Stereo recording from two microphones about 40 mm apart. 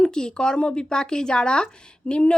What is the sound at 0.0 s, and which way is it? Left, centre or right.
Speech, centre.